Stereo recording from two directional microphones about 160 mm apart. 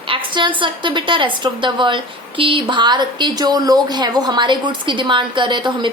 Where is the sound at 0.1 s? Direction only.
30° right (ahead or behind).